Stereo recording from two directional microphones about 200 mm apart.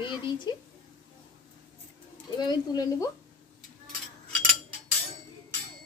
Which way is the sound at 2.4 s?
20° left (ahead or behind).